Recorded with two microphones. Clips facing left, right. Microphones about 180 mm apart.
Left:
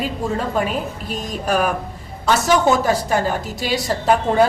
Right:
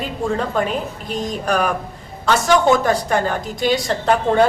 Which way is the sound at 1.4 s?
5° left (ahead or behind).